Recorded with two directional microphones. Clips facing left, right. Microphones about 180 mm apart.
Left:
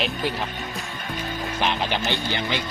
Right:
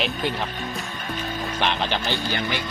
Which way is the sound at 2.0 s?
20° left (ahead or behind).